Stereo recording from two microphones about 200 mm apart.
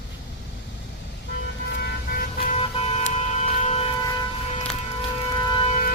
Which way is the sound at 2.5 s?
30° left (ahead or behind).